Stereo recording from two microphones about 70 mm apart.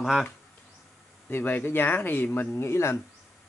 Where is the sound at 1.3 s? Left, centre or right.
Left.